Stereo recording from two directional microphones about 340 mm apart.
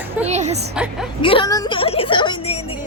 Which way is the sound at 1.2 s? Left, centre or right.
Centre.